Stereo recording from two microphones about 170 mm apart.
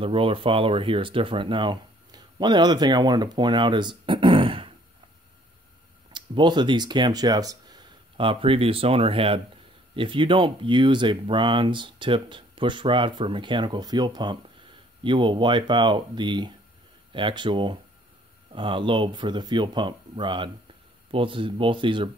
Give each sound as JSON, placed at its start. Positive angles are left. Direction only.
{"t": 0.0, "sound": "speech", "side_deg": -30}
{"t": 6.1, "sound": "speech", "side_deg": -25}